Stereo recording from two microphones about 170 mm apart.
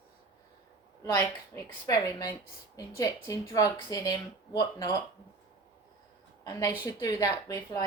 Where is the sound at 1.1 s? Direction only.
20° left (ahead or behind).